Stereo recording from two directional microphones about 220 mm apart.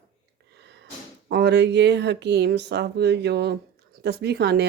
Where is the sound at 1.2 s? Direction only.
50° right (ahead or behind).